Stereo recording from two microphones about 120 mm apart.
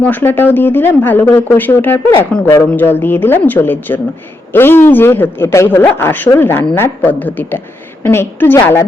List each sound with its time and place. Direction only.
0.0 s a woman's voice: 15° left (ahead or behind)